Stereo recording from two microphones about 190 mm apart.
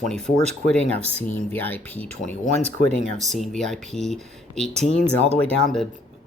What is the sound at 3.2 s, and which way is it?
Speech, centre (ahead or behind).